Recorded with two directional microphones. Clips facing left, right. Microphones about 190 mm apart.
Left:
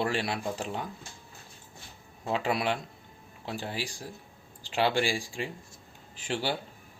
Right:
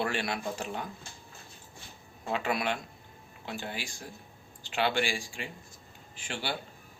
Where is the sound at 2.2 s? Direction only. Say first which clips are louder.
Left 2 dB; 30° left (ahead or behind).